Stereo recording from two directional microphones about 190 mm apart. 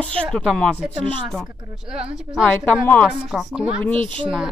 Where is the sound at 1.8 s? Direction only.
5° right (ahead or behind).